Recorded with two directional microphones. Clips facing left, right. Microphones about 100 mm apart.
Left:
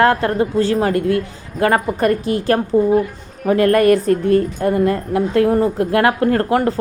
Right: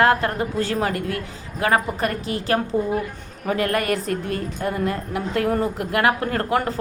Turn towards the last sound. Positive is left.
turn(degrees=35)  # may be behind; listen again after turning